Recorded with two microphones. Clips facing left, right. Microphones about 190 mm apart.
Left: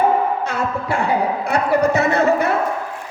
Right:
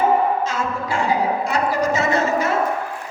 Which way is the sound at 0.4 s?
60° left (ahead or behind).